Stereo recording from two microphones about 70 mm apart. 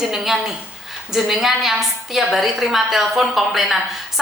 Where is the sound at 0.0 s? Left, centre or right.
Centre.